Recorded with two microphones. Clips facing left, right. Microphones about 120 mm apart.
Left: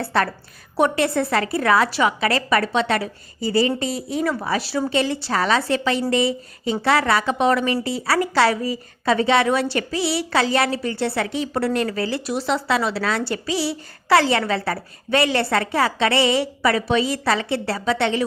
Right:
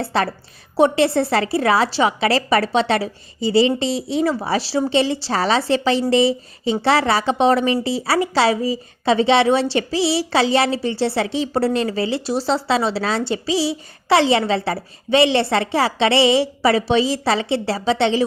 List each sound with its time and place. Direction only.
0.0 s a woman's voice: 25° right (ahead or behind)